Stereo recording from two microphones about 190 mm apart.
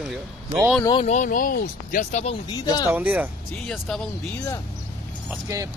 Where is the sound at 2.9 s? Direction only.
10° right (ahead or behind).